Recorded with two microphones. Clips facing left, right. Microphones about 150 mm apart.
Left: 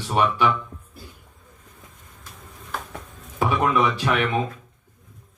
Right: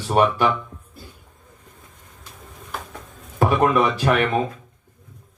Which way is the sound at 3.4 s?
45° right (ahead or behind).